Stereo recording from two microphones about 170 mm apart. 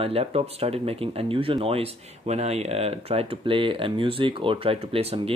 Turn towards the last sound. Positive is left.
turn(degrees=-35)  # may be behind; listen again after turning